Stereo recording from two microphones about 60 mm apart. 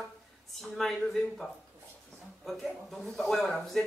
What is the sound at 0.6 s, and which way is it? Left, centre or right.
Speech, centre.